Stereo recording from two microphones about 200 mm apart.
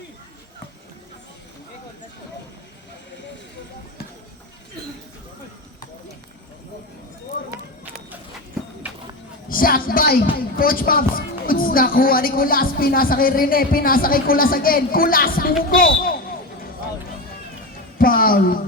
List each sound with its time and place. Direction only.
9.5 s a woman's voice: 45° left (ahead or behind)
17.9 s speech: 45° left (ahead or behind)